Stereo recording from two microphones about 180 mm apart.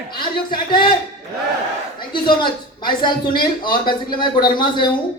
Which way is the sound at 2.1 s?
25° left (ahead or behind).